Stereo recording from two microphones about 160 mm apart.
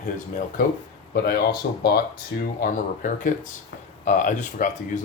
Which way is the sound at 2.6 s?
55° left (ahead or behind).